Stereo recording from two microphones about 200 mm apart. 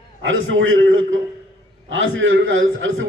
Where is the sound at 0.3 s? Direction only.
75° right (ahead or behind).